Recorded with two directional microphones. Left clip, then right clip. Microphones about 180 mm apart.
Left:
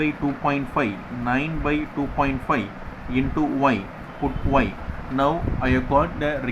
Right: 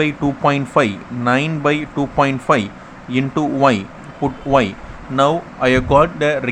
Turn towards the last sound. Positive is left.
turn(degrees=-45)  # may be behind; listen again after turning